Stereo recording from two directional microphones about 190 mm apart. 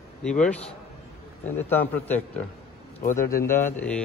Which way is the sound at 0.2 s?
5° left (ahead or behind).